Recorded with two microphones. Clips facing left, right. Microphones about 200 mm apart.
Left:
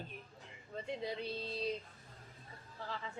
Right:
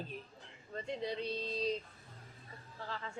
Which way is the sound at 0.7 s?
5° left (ahead or behind).